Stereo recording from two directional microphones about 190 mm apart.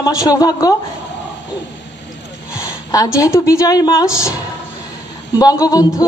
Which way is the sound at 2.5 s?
15° left (ahead or behind).